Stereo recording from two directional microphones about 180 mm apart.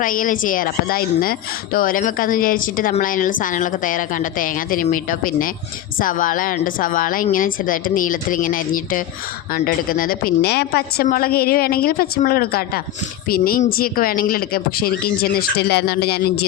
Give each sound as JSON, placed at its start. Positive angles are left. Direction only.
{"t": 0.0, "sound": "a woman's voice", "side_deg": 50}